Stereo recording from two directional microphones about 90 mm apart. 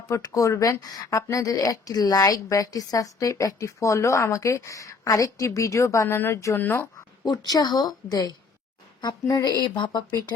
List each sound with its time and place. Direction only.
0.1 s speech: 35° left (ahead or behind)
7.3 s a woman's voice: 50° left (ahead or behind)
9.4 s a woman's voice: 55° left (ahead or behind)